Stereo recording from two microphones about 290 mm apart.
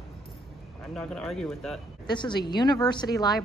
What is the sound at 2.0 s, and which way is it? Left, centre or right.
A woman's voice, centre.